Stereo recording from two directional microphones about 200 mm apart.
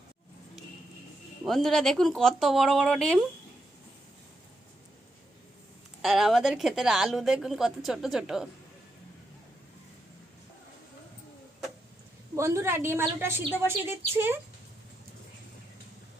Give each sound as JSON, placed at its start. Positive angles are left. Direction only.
{"t": 1.5, "sound": "speech", "side_deg": 0}
{"t": 6.0, "sound": "speech", "side_deg": 0}
{"t": 12.4, "sound": "a woman's voice", "side_deg": -15}